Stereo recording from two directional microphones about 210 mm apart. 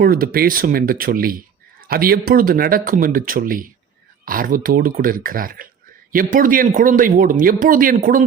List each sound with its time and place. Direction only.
0.0 s speech: 45° right (ahead or behind)